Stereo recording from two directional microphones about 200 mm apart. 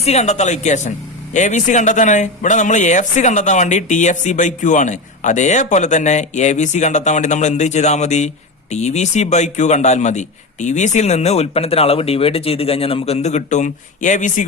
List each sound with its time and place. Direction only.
0.0 s speech: 35° left (ahead or behind)